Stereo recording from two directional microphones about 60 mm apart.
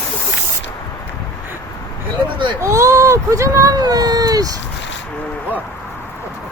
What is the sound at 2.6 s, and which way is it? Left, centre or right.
Speech, right.